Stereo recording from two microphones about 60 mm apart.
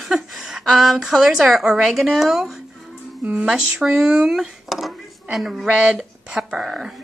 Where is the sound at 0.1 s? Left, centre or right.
Centre.